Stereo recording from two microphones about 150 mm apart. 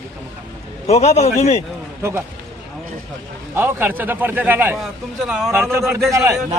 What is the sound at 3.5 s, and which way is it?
A man's voice, 15° right (ahead or behind).